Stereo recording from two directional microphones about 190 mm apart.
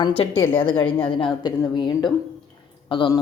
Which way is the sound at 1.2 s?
25° left (ahead or behind).